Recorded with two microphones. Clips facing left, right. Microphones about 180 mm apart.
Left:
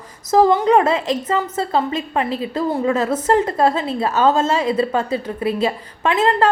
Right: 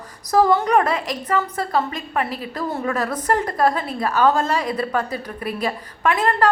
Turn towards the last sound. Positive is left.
turn(degrees=20)  # may be behind; listen again after turning